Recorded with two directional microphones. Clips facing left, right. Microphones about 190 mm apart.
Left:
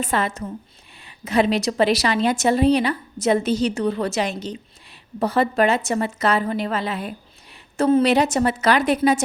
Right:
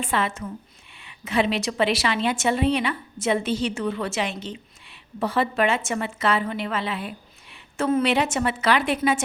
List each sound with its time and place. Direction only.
0.0 s a woman's voice: 40° left (ahead or behind)